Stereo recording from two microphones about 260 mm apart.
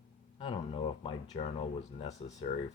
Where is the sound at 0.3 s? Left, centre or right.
Centre.